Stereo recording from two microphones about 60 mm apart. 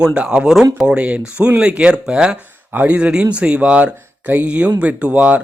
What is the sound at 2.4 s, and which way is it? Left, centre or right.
Speech, right.